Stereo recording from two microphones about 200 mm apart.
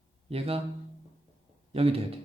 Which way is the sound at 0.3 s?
30° right (ahead or behind).